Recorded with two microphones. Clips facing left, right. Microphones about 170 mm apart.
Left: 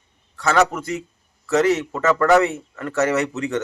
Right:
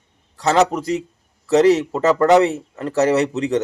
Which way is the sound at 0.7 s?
35° right (ahead or behind).